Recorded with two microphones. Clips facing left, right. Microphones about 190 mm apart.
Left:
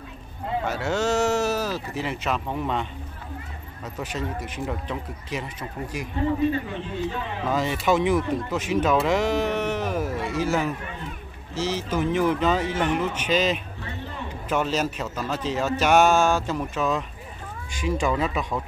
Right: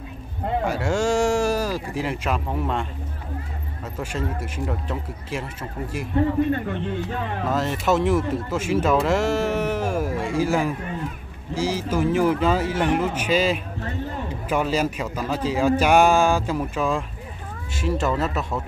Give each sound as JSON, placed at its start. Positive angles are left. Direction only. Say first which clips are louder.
{"t": 0.7, "sound": "speech", "louder": "right 2 dB", "side_deg": -10}
{"t": 4.0, "sound": "speech", "louder": "right 2 dB", "side_deg": -10}
{"t": 6.2, "sound": "speech", "louder": "right 3 dB", "side_deg": -65}
{"t": 7.4, "sound": "a man's voice", "louder": "even", "side_deg": 0}